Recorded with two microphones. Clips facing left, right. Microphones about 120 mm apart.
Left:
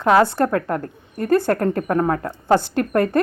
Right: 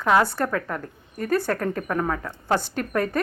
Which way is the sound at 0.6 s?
45° left (ahead or behind).